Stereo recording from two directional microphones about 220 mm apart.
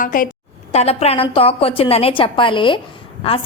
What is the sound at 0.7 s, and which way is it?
A woman's voice, 30° left (ahead or behind).